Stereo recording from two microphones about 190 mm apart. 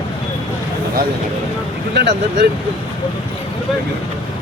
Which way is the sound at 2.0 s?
60° right (ahead or behind).